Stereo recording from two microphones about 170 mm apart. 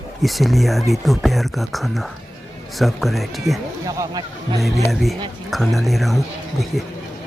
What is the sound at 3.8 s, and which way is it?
Speech, 20° right (ahead or behind).